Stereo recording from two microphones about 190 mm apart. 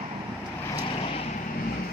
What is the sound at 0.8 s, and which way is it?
Vehicle, 30° left (ahead or behind).